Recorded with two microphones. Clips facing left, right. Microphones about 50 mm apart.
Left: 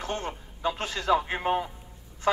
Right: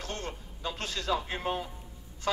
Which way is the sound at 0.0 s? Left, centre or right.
Left.